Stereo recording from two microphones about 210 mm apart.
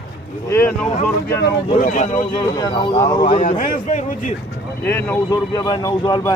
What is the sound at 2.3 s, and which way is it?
Speech, 20° left (ahead or behind).